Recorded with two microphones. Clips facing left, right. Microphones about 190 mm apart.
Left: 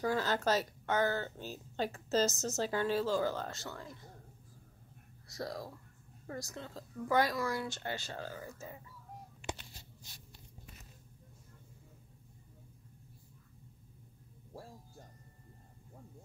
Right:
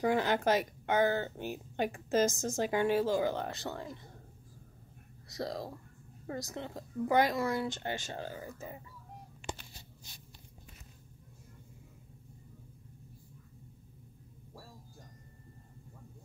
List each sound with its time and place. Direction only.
0.0 s a woman's voice: 20° right (ahead or behind)
5.3 s a woman's voice: 25° right (ahead or behind)